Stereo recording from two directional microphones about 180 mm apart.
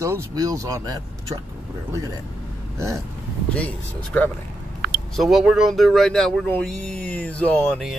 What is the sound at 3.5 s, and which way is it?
Speech, 5° left (ahead or behind).